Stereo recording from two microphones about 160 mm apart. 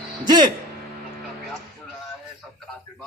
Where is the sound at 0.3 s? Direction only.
25° right (ahead or behind).